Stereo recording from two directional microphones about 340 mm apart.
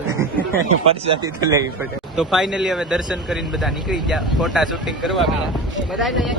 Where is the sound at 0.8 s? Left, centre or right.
Centre.